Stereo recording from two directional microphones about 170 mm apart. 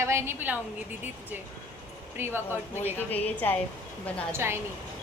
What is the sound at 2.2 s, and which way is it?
Speech, 10° right (ahead or behind).